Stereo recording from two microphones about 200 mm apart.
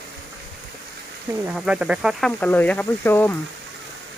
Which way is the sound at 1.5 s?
5° right (ahead or behind).